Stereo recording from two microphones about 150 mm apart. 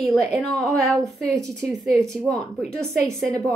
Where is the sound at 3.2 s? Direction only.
5° left (ahead or behind).